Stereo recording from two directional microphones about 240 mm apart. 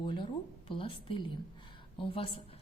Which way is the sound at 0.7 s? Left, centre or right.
Left.